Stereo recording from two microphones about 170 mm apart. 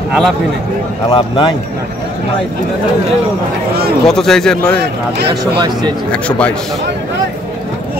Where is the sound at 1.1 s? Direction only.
30° left (ahead or behind).